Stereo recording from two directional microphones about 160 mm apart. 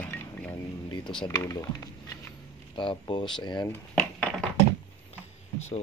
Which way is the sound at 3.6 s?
10° left (ahead or behind).